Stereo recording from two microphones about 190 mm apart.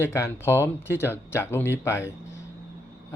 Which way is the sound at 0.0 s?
15° left (ahead or behind).